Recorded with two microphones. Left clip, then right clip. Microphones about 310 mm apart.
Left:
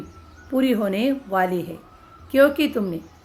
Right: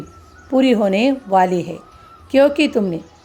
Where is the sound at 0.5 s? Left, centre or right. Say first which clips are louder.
Right 7 dB; centre.